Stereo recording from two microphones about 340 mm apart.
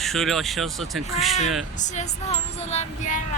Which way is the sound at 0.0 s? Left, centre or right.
Centre.